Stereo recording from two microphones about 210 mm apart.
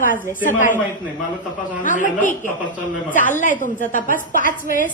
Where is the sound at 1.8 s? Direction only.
40° left (ahead or behind).